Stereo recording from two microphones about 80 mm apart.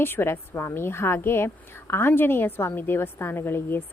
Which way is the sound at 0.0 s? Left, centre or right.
Left.